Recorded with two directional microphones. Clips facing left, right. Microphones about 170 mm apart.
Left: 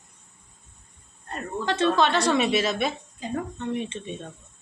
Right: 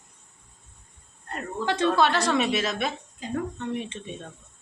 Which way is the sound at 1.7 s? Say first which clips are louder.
Even; 10° right (ahead or behind).